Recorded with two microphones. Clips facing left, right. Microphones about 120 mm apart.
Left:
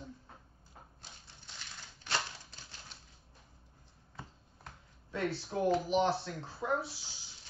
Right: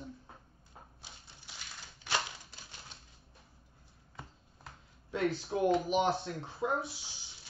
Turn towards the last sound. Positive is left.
turn(degrees=-15)  # may be behind; listen again after turning